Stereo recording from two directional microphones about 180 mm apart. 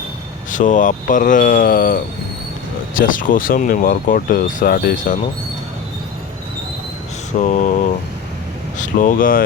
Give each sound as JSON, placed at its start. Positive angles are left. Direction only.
{"t": 0.5, "sound": "speech", "side_deg": 45}
{"t": 7.3, "sound": "a sound", "side_deg": 40}
{"t": 8.8, "sound": "speech", "side_deg": 45}